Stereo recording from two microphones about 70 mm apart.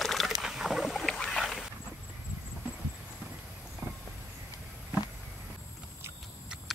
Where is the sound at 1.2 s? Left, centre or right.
Centre.